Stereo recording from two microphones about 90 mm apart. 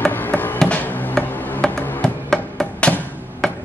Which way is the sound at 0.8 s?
20° left (ahead or behind).